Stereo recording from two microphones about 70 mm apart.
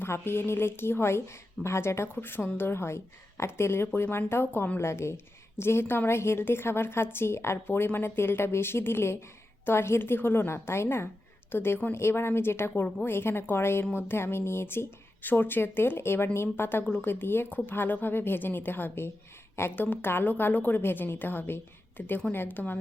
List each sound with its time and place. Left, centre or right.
0.0 s a woman's voice: left
2.1 s a woman's voice: left